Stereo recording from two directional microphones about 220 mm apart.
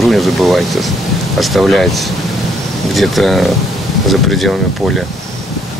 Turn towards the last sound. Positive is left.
turn(degrees=0)  # may be behind; listen again after turning